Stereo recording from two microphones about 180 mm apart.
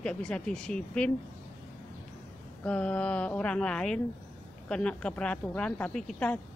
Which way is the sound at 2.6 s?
5° left (ahead or behind).